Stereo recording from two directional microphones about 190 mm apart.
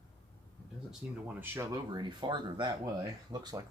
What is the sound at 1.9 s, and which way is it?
Speech, 25° right (ahead or behind).